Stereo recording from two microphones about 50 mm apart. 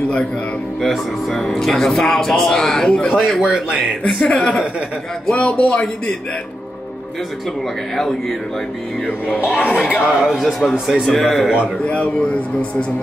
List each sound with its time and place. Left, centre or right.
0.7 s a man's voice: centre
3.4 s speech: centre
4.1 s speech: centre
5.3 s a man's voice: left
7.9 s a man's voice: centre
9.9 s a man's voice: centre
11.8 s a man's voice: left